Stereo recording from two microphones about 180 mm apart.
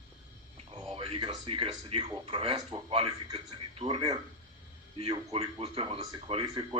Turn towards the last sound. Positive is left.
turn(degrees=-30)  # may be behind; listen again after turning